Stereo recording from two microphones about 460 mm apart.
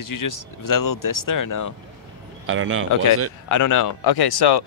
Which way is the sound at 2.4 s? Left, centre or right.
Right.